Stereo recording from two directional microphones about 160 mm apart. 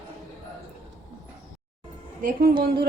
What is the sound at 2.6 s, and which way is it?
Music, 70° right (ahead or behind).